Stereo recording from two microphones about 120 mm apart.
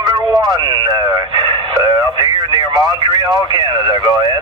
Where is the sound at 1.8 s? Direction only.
45° right (ahead or behind).